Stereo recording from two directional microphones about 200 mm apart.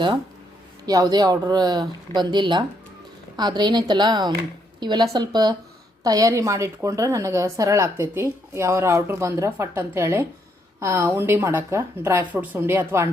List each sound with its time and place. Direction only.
0.9 s a woman's voice: 20° right (ahead or behind)